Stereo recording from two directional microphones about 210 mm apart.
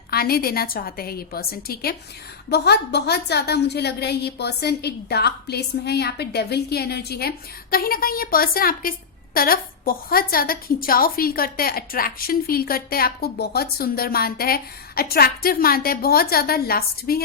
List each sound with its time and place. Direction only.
0.1 s a woman's voice: 45° left (ahead or behind)